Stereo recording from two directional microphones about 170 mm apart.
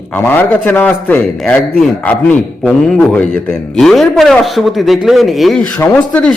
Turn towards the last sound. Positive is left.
turn(degrees=5)  # may be behind; listen again after turning